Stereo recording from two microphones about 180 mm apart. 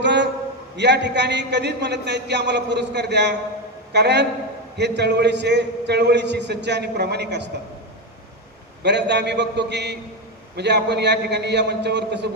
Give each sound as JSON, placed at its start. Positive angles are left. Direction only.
{"t": 0.0, "sound": "a sound", "side_deg": -75}
{"t": 0.8, "sound": "a man's voice", "side_deg": -70}
{"t": 8.8, "sound": "a man's voice", "side_deg": -70}